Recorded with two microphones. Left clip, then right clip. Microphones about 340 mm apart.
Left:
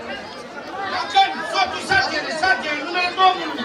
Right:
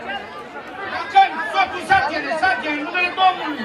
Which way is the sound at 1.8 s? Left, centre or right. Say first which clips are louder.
Right 2 dB; right.